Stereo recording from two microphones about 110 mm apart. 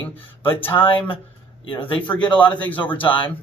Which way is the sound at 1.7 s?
45° left (ahead or behind).